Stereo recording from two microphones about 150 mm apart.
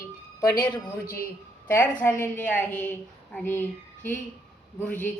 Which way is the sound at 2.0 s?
15° left (ahead or behind).